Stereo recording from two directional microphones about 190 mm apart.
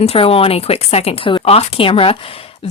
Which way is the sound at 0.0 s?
30° left (ahead or behind).